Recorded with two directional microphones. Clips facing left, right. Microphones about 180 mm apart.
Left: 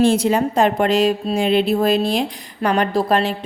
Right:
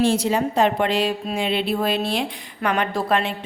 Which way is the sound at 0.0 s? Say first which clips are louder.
Left 4 dB; 55° left (ahead or behind).